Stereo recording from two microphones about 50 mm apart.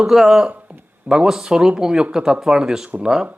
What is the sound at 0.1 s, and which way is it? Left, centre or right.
Speech, centre.